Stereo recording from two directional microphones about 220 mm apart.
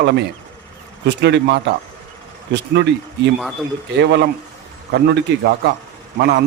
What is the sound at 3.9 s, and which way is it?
Speech, 50° right (ahead or behind).